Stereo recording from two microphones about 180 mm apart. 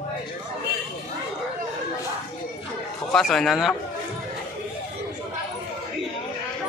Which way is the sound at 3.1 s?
Centre (ahead or behind).